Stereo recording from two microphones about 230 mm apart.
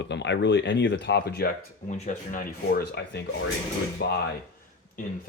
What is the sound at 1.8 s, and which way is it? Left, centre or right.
Speech, left.